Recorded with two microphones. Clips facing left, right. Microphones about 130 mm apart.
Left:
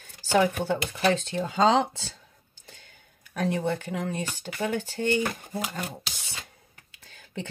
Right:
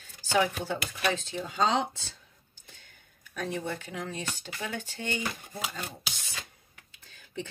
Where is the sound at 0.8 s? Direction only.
25° left (ahead or behind).